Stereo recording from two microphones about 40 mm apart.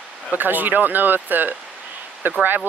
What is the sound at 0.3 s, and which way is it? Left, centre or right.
Speech, right.